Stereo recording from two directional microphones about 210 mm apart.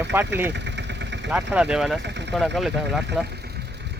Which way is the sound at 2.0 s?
55° right (ahead or behind).